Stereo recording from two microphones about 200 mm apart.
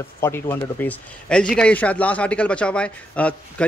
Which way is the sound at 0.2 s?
10° left (ahead or behind).